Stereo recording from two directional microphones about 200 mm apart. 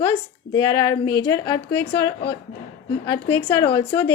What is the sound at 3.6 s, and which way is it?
Speech, 15° left (ahead or behind).